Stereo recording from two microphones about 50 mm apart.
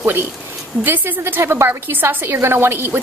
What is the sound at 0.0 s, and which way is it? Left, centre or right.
A woman's voice, right.